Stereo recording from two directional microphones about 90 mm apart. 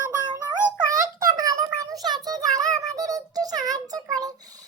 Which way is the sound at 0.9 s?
40° right (ahead or behind).